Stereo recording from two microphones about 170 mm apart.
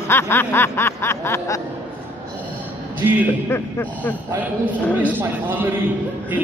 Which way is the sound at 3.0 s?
10° right (ahead or behind).